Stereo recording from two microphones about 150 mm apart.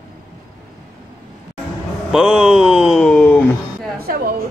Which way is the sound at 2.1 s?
5° right (ahead or behind).